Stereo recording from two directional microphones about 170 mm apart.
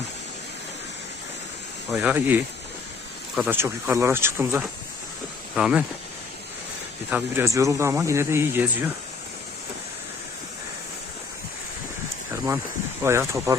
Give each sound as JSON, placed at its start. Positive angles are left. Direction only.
{"t": 1.9, "sound": "speech", "side_deg": -5}
{"t": 7.1, "sound": "speech", "side_deg": -15}
{"t": 13.0, "sound": "speech", "side_deg": -15}